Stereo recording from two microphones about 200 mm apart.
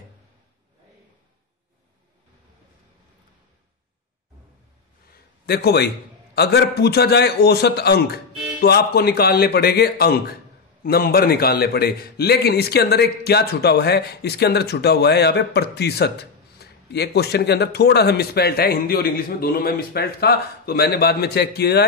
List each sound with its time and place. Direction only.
5.5 s a man's voice: 55° left (ahead or behind)